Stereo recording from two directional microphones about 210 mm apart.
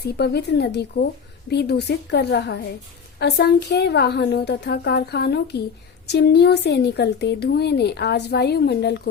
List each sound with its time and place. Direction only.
0.2 s speech: 50° left (ahead or behind)